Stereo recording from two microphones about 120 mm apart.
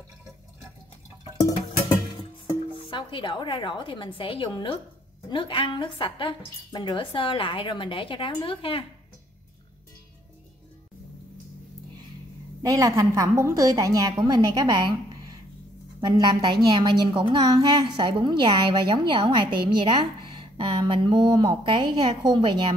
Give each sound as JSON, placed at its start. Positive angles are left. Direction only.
{"t": 2.7, "sound": "a woman's voice", "side_deg": 45}
{"t": 12.6, "sound": "a woman's voice", "side_deg": -30}